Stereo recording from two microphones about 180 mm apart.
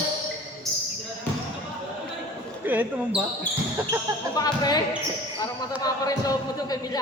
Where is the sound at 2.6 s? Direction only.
10° right (ahead or behind).